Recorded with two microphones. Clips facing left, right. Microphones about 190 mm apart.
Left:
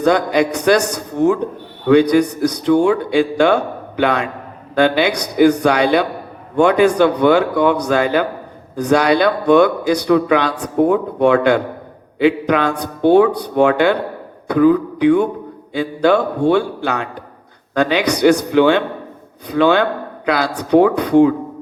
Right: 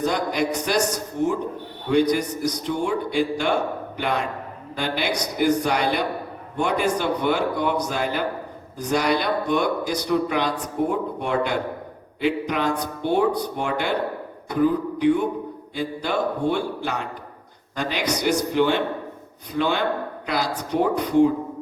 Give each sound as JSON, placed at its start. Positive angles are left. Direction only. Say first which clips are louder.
{"t": 0.0, "sound": "a man's voice", "louder": "left 8 dB", "side_deg": 70}
{"t": 8.7, "sound": "a man's voice", "louder": "left 8 dB", "side_deg": 70}
{"t": 14.4, "sound": "a man's voice", "louder": "left 8 dB", "side_deg": 75}